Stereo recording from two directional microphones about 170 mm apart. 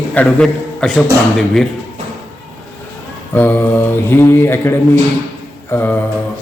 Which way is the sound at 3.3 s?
10° left (ahead or behind).